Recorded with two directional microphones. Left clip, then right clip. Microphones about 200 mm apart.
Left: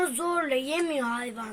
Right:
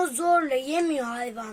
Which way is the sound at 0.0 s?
30° right (ahead or behind).